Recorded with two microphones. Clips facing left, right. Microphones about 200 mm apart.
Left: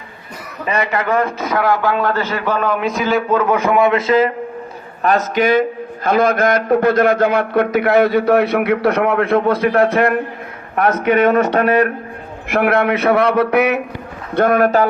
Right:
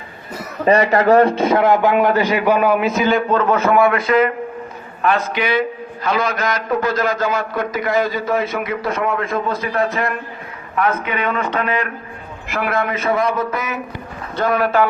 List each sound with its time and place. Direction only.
0.6 s a man's voice: 35° right (ahead or behind); by 4.3 s 25° left (ahead or behind)
5.0 s a man's voice: 45° left (ahead or behind)
11.0 s speech: 45° left (ahead or behind)
12.5 s speech: 55° left (ahead or behind)
14.3 s speech: 55° left (ahead or behind)